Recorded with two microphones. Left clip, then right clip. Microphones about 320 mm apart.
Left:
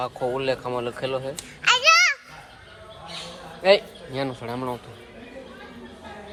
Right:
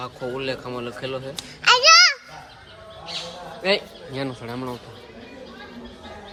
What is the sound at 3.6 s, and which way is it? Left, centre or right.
Speech, centre.